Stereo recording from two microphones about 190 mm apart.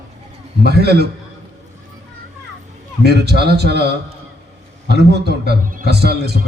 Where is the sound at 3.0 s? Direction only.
60° right (ahead or behind).